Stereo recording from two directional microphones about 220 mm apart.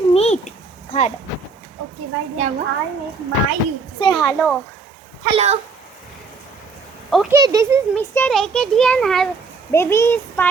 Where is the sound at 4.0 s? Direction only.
20° left (ahead or behind).